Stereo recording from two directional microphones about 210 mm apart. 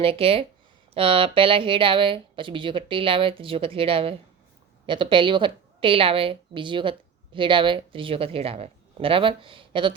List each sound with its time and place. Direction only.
0.0 s speech: 25° right (ahead or behind)